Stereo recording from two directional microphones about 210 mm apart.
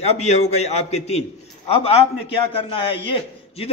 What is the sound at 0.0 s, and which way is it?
A man's voice, 30° left (ahead or behind).